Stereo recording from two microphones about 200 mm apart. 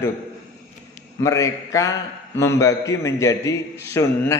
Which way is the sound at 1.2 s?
15° left (ahead or behind).